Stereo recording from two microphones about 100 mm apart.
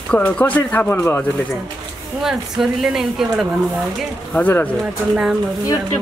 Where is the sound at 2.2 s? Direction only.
5° right (ahead or behind).